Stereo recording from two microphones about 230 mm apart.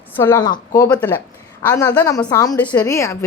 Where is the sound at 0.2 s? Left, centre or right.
Centre.